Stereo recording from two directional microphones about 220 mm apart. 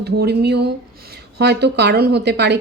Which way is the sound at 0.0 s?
50° right (ahead or behind).